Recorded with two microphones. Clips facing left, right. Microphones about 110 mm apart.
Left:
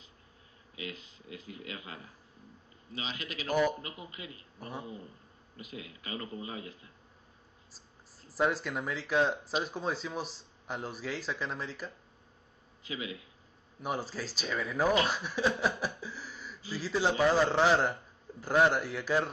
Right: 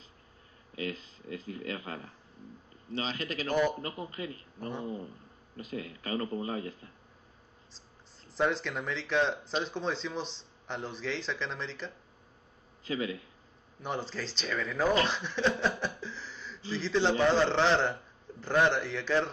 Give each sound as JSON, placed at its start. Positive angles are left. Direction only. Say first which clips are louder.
{"t": 0.7, "sound": "speech", "louder": "right 6 dB", "side_deg": -40}
{"t": 3.4, "sound": "a man's voice", "louder": "even", "side_deg": 5}
{"t": 3.8, "sound": "speech", "louder": "right 7 dB", "side_deg": -40}
{"t": 7.7, "sound": "speech", "louder": "right 1 dB", "side_deg": 5}
{"t": 12.8, "sound": "speech", "louder": "right 6 dB", "side_deg": -40}
{"t": 13.8, "sound": "speech", "louder": "even", "side_deg": 10}